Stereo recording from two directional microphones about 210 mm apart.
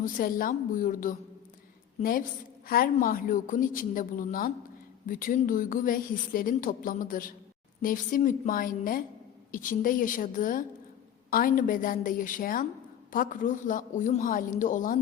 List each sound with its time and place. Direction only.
0.0 s a woman's voice: 40° left (ahead or behind)